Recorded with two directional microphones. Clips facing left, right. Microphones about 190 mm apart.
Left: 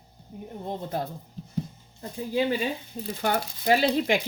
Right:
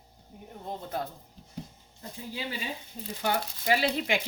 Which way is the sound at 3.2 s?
45° left (ahead or behind).